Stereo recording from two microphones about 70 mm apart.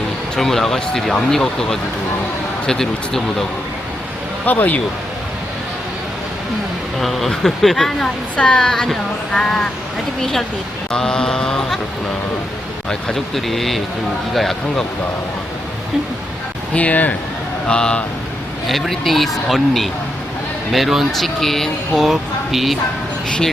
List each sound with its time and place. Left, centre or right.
0.3 s speech: centre
4.4 s speech: left
7.0 s speech: centre
10.9 s speech: centre
12.9 s speech: centre
16.7 s speech: left
18.7 s speech: centre